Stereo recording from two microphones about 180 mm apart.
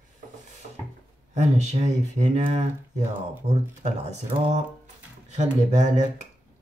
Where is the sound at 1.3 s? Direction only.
40° right (ahead or behind).